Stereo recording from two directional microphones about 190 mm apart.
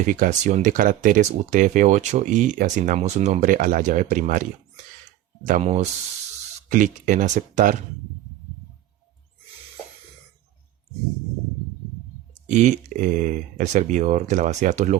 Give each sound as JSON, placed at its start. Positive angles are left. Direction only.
{"t": 0.0, "sound": "speech", "side_deg": -45}
{"t": 5.5, "sound": "speech", "side_deg": -40}
{"t": 12.5, "sound": "speech", "side_deg": -40}